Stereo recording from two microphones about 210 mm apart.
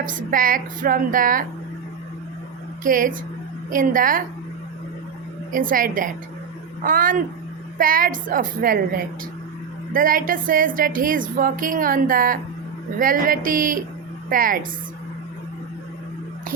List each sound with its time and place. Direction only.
0.0 s a woman's voice: 40° right (ahead or behind)
2.8 s a woman's voice: 40° right (ahead or behind)
5.5 s a woman's voice: 40° right (ahead or behind)